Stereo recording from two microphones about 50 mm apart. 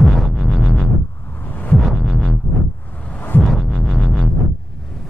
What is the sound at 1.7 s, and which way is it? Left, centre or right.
Heart sounds, centre.